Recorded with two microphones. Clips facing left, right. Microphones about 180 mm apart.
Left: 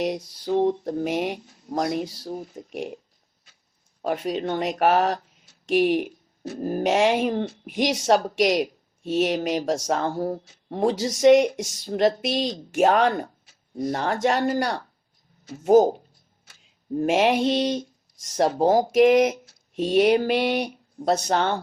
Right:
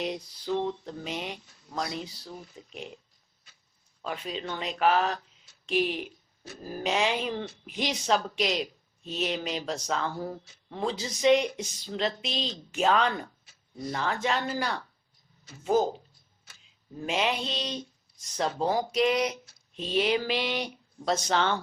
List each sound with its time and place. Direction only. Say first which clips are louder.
0.0 s speech: left 6 dB; 45° left (ahead or behind)
4.0 s speech: left 9 dB; 50° left (ahead or behind)
21.1 s speech: left 4 dB; 45° left (ahead or behind)